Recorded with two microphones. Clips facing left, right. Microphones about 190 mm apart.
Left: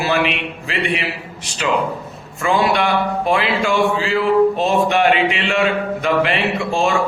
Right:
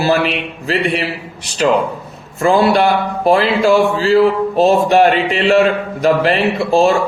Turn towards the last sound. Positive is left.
turn(degrees=-35)  # may be behind; listen again after turning